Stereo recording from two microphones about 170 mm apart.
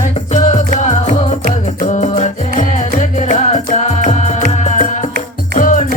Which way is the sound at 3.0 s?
40° left (ahead or behind).